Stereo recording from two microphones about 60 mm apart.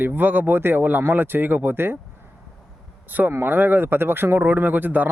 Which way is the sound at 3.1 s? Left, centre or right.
Right.